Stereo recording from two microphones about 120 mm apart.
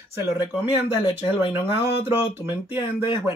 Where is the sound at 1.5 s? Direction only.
20° right (ahead or behind).